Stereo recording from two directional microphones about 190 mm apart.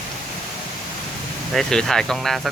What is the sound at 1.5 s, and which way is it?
Speech, centre (ahead or behind).